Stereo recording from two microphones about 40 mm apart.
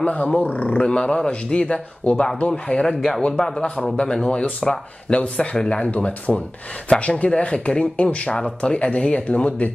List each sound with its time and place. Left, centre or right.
0.0 s speech: left
3.2 s speech: centre